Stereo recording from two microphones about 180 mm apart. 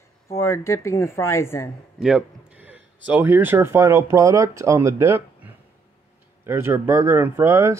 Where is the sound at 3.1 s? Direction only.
10° right (ahead or behind).